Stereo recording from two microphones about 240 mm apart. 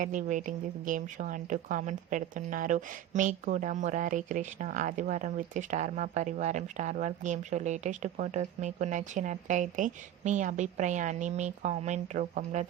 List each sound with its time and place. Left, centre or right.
0.0 s a woman's voice: right